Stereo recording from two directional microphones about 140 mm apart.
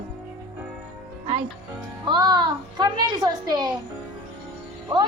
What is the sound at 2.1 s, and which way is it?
A child's voice, 30° right (ahead or behind).